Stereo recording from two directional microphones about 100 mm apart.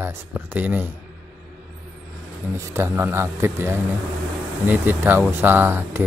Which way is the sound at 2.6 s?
30° right (ahead or behind).